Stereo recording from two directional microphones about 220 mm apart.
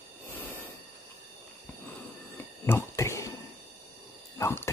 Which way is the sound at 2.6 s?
10° left (ahead or behind).